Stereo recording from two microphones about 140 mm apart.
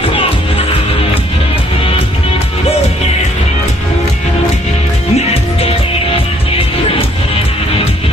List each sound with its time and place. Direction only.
0.1 s music: 40° left (ahead or behind)
5.1 s music: 45° left (ahead or behind)